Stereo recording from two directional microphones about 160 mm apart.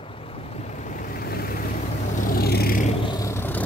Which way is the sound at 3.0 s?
25° left (ahead or behind).